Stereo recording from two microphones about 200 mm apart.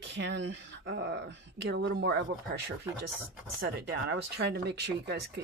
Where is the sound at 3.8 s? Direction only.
60° right (ahead or behind).